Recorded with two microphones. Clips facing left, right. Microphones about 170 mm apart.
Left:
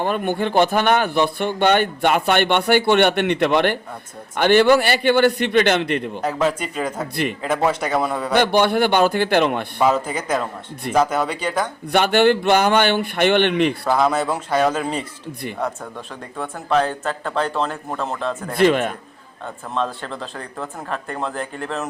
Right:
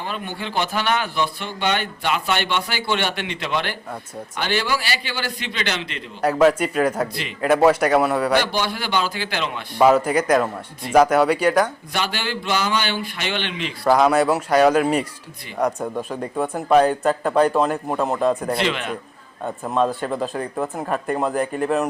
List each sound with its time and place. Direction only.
0.0 s a man's voice: 55° left (ahead or behind)
6.2 s speech: 10° right (ahead or behind)
8.4 s a man's voice: 55° left (ahead or behind)
9.8 s speech: 10° right (ahead or behind)
11.9 s a man's voice: 55° left (ahead or behind)
13.9 s speech: 10° right (ahead or behind)
18.5 s a man's voice: 50° left (ahead or behind)
19.6 s speech: 15° right (ahead or behind)